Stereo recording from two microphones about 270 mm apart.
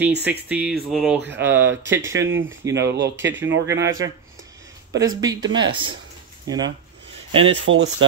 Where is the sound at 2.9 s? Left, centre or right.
Right.